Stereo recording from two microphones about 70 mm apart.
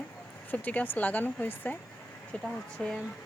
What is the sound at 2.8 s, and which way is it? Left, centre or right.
Speech, centre.